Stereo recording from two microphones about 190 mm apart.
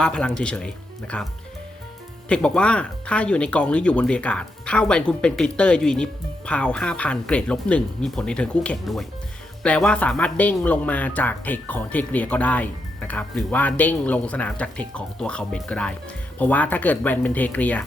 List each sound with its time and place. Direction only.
0.0 s speech: 5° left (ahead or behind)
2.3 s speech: 5° left (ahead or behind)